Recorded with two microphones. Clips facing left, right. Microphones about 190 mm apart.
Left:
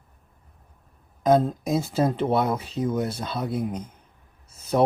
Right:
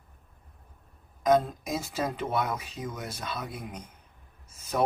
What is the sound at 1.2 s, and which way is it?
Speech, 30° left (ahead or behind).